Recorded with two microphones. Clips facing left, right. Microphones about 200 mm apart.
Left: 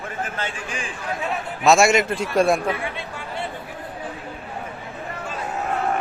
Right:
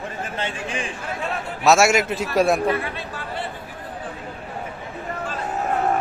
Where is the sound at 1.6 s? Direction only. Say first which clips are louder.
Even; 5° right (ahead or behind).